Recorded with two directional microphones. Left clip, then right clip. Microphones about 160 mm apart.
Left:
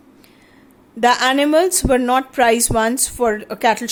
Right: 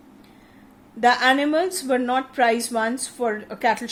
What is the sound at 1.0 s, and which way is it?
A woman's voice, 40° left (ahead or behind).